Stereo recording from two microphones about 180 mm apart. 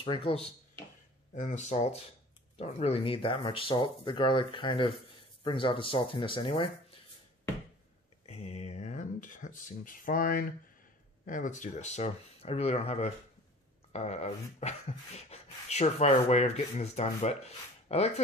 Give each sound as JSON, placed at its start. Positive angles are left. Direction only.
{"t": 0.0, "sound": "speech", "side_deg": 30}
{"t": 1.3, "sound": "speech", "side_deg": 45}
{"t": 8.3, "sound": "a sound", "side_deg": 40}
{"t": 11.2, "sound": "speech", "side_deg": 45}